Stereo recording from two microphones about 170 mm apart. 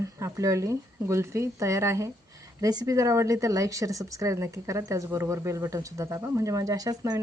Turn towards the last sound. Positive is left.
turn(degrees=-20)  # may be behind; listen again after turning